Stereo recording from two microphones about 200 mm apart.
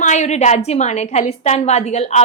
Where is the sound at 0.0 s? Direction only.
35° left (ahead or behind).